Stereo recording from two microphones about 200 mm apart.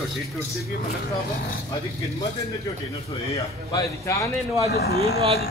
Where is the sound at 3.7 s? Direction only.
15° left (ahead or behind).